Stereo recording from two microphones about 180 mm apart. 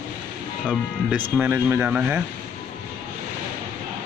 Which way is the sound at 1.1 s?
10° right (ahead or behind).